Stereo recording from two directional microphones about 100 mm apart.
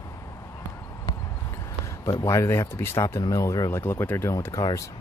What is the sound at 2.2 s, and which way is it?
Speech, 25° left (ahead or behind).